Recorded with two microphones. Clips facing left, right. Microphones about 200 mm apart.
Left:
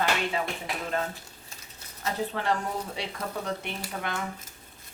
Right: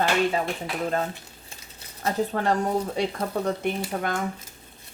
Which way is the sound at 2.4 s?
45° right (ahead or behind).